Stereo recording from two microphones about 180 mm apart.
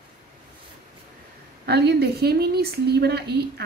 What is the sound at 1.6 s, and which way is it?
A woman's voice, 65° right (ahead or behind).